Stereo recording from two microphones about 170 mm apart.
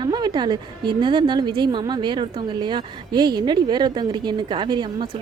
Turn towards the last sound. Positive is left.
turn(degrees=-25)  # may be behind; listen again after turning